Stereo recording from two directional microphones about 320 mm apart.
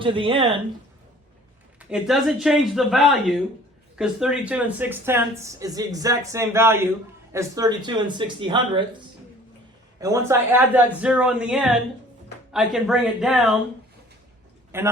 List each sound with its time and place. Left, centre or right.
0.0 s speech: centre
1.8 s speech: centre
10.0 s speech: centre
14.7 s speech: centre